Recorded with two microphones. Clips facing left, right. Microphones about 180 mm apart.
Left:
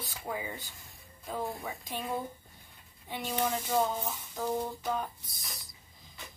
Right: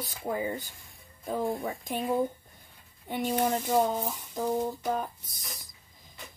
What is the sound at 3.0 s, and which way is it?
Speech, 50° right (ahead or behind).